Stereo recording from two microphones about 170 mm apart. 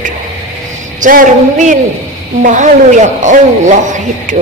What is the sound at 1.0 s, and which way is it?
A man's voice, 45° right (ahead or behind).